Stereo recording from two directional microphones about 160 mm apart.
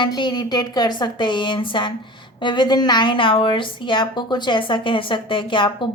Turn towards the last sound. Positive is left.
turn(degrees=30)  # may be behind; listen again after turning